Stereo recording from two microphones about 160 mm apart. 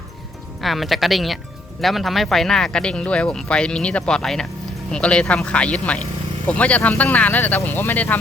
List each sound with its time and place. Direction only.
0.6 s speech: centre (ahead or behind)